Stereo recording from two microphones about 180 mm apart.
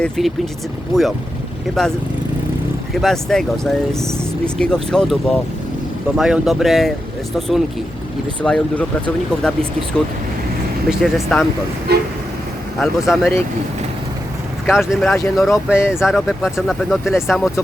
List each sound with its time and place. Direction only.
0.0 s speech: centre (ahead or behind)
1.8 s speech: centre (ahead or behind)
10.8 s speech: centre (ahead or behind)
11.9 s vehicle: 65° right (ahead or behind)
12.8 s speech: centre (ahead or behind)
14.7 s speech: centre (ahead or behind)